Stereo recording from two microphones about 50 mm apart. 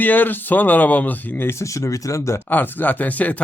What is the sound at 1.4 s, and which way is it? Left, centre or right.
Speech, left.